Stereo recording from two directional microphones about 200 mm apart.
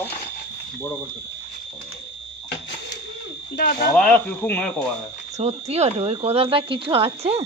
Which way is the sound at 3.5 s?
45° left (ahead or behind).